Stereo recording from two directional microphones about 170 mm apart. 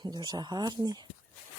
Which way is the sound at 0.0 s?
25° right (ahead or behind).